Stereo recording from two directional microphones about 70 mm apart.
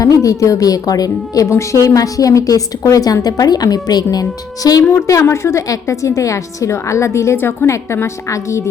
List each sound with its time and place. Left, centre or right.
0.0 s a woman's voice: left
1.5 s a woman's voice: left
7.3 s a woman's voice: left
8.0 s a woman's voice: left